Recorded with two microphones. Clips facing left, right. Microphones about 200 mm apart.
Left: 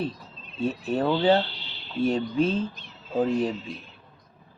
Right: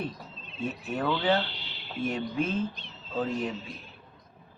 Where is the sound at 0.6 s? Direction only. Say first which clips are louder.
Left 6 dB; 30° left (ahead or behind).